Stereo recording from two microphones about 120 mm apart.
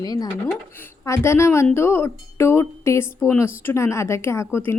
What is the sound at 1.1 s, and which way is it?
A woman's voice, 20° left (ahead or behind).